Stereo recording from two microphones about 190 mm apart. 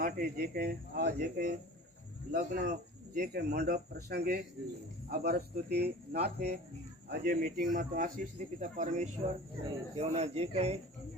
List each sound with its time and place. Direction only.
0.0 s speech: 50° right (ahead or behind); by 10.8 s 35° right (ahead or behind)